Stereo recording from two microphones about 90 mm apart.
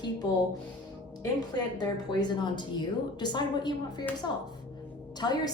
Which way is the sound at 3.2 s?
55° left (ahead or behind).